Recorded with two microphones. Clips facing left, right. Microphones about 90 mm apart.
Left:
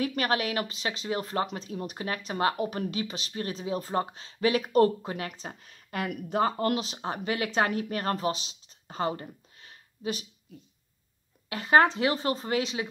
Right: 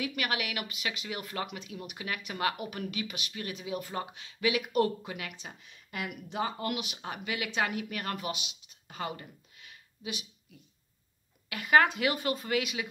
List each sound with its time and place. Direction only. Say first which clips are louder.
0.0 s a woman's voice: left 6 dB; 40° left (ahead or behind)
11.4 s speech: left 3 dB; 30° left (ahead or behind)